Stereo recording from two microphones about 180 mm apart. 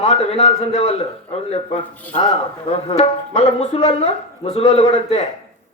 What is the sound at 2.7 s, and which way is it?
Speech, 35° left (ahead or behind).